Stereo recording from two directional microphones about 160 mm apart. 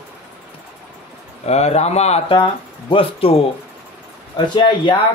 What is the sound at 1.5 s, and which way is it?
Speech, 45° left (ahead or behind).